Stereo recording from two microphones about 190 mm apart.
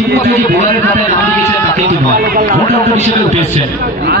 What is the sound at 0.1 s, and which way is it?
Speech, 55° right (ahead or behind).